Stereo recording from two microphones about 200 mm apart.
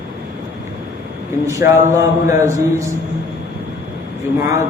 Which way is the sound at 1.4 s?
15° right (ahead or behind).